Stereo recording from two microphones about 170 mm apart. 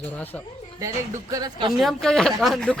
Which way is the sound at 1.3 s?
25° right (ahead or behind).